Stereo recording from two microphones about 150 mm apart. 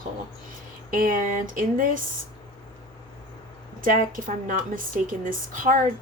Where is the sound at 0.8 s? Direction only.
65° right (ahead or behind).